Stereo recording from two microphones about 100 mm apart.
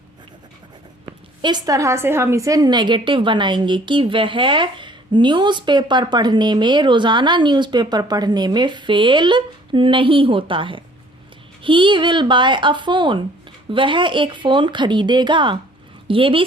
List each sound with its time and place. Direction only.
1.4 s a woman's voice: 45° right (ahead or behind)